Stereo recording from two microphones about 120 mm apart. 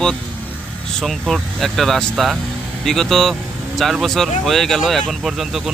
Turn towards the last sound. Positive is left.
turn(degrees=0)  # may be behind; listen again after turning